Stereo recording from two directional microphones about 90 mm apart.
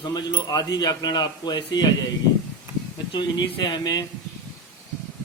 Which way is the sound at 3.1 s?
55° left (ahead or behind).